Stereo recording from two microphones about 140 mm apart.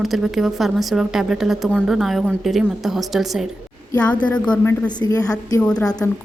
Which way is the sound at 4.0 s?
10° left (ahead or behind).